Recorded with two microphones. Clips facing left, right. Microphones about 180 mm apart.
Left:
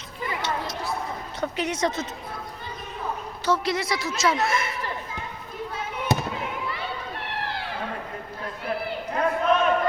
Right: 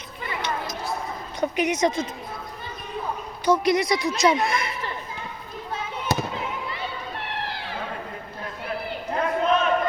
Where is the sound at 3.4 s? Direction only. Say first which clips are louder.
Right 5 dB; 15° right (ahead or behind).